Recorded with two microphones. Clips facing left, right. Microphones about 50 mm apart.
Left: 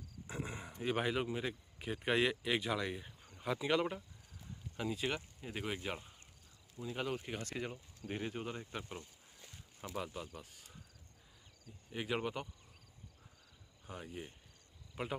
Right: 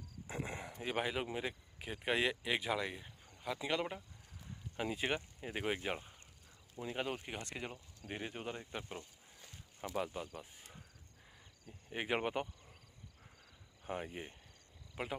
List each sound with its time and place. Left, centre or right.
0.3 s speech: centre
4.7 s speech: right
7.2 s speech: centre
10.4 s a sound: right
11.9 s speech: right
13.8 s speech: right
15.0 s speech: centre